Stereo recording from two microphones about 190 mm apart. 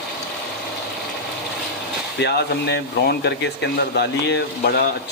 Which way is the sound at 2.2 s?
65° left (ahead or behind).